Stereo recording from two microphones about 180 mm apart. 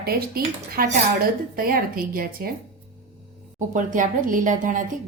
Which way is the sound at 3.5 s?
45° right (ahead or behind).